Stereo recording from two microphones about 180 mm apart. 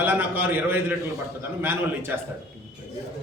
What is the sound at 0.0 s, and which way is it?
A man's voice, 10° right (ahead or behind).